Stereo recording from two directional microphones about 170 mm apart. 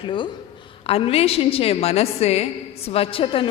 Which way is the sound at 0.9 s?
35° left (ahead or behind).